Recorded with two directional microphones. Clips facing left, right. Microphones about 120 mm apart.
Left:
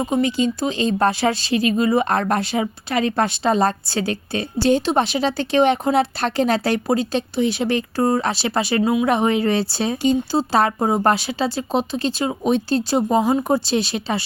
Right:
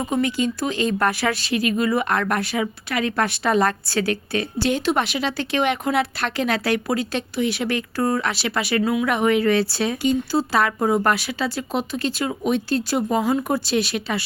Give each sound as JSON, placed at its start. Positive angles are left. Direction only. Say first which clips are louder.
{"t": 0.0, "sound": "speech", "louder": "left 3 dB", "side_deg": 20}